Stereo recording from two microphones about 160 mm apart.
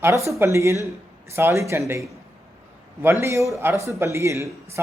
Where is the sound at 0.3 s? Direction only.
15° right (ahead or behind).